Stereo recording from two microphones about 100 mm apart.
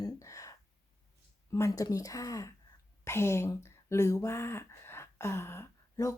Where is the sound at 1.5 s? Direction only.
30° left (ahead or behind).